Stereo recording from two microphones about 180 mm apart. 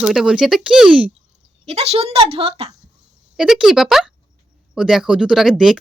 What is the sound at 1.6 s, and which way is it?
A woman's voice, 35° right (ahead or behind).